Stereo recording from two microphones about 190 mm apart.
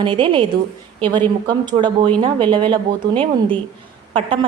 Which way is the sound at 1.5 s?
25° right (ahead or behind).